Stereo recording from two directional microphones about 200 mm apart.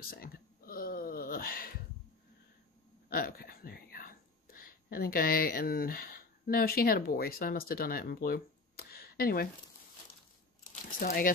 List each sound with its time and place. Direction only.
0.1 s a sound: 45° left (ahead or behind)
3.1 s speech: 50° left (ahead or behind)
10.6 s crumpling: 40° left (ahead or behind)